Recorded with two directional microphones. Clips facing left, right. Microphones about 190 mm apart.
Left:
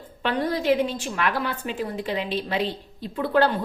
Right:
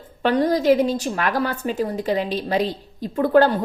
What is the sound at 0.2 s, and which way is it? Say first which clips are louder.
A woman's voice: right 6 dB; 40° right (ahead or behind).